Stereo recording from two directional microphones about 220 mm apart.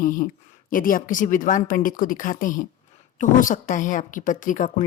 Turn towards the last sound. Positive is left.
turn(degrees=35)  # may be behind; listen again after turning